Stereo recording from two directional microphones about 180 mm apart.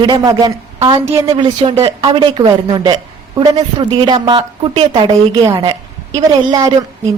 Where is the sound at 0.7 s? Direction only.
30° right (ahead or behind).